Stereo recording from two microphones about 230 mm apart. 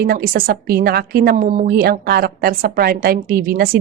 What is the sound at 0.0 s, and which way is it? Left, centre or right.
A woman's voice, right.